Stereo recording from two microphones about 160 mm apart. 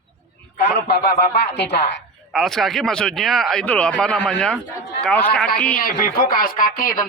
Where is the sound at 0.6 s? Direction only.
90° left.